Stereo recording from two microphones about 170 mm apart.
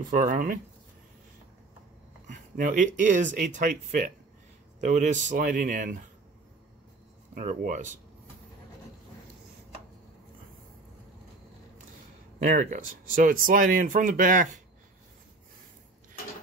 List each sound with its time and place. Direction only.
0.1 s speech: 50° right (ahead or behind)
2.2 s speech: 50° right (ahead or behind)
7.3 s speech: 45° right (ahead or behind)
12.4 s speech: 50° right (ahead or behind)